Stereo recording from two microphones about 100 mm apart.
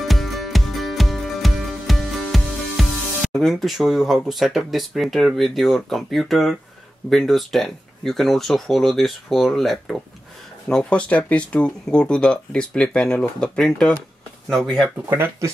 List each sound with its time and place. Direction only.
0.0 s music: centre (ahead or behind)
3.3 s speech: 5° left (ahead or behind)
15.0 s speech: 25° right (ahead or behind)